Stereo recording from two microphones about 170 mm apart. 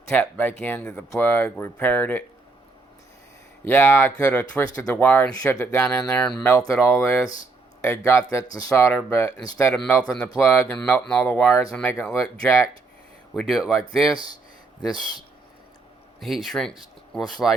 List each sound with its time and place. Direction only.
0.1 s speech: 10° left (ahead or behind)
3.7 s speech: 10° left (ahead or behind)
10.0 s speech: 5° left (ahead or behind)
10.4 s speech: 20° left (ahead or behind)
10.7 s speech: 5° left (ahead or behind)
11.4 s speech: 15° left (ahead or behind)
12.5 s speech: 15° left (ahead or behind)
13.3 s speech: centre (ahead or behind)
16.2 s speech: centre (ahead or behind)